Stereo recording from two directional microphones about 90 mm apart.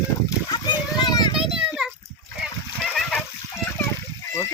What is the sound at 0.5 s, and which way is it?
Children playing, 55° left (ahead or behind).